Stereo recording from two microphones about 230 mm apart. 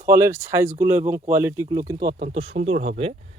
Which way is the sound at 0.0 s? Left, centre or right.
Centre.